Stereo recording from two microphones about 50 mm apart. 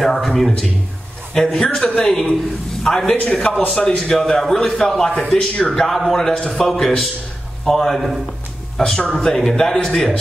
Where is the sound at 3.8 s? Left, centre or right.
Centre.